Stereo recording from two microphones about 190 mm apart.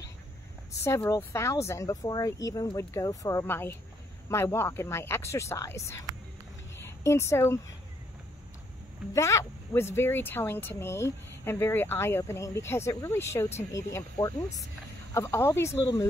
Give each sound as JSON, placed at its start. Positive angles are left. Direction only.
{"t": 0.8, "sound": "speech", "side_deg": 15}
{"t": 9.1, "sound": "speech", "side_deg": 15}